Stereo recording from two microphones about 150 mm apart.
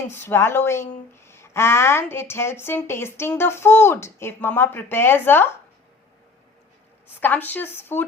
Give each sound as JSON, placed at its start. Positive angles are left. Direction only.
{"t": 0.1, "sound": "a woman's voice", "side_deg": 15}
{"t": 7.2, "sound": "a woman's voice", "side_deg": 10}